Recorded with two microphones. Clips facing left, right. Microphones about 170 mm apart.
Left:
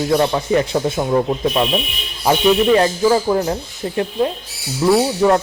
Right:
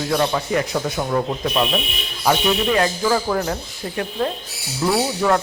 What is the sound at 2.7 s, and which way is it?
Speech, 30° left (ahead or behind).